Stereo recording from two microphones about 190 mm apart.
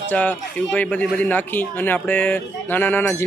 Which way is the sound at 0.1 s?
10° left (ahead or behind).